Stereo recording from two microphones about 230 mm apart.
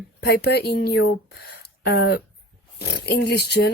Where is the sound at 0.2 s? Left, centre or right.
Left.